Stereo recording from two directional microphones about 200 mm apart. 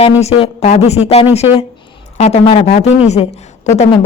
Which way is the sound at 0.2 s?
30° left (ahead or behind).